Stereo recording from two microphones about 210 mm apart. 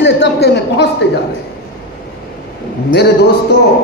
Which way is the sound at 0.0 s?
55° left (ahead or behind).